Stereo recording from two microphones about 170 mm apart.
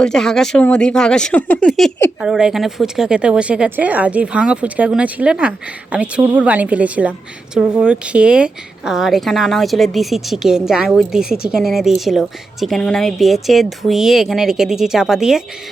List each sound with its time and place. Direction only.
0.0 s a woman's voice: 5° left (ahead or behind)